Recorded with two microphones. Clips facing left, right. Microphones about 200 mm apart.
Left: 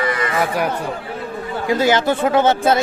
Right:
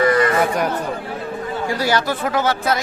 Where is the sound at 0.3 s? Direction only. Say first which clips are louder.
Right 1 dB; 5° left (ahead or behind).